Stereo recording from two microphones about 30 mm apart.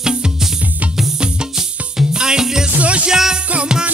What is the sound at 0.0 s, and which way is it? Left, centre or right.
Music, right.